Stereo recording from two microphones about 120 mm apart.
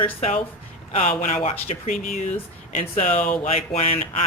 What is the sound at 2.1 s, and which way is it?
Speech, 80° left.